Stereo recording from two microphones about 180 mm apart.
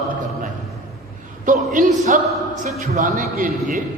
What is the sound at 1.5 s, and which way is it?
A man's voice, 45° right (ahead or behind).